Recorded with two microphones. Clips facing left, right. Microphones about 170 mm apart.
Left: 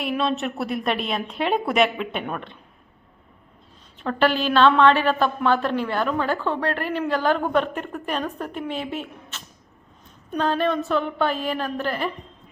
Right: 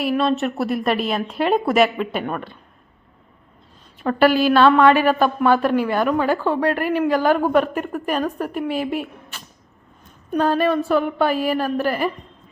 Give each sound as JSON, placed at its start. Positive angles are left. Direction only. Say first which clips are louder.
{"t": 0.0, "sound": "a woman's voice", "louder": "right 5 dB", "side_deg": 0}
{"t": 4.0, "sound": "a woman's voice", "louder": "right 5 dB", "side_deg": -10}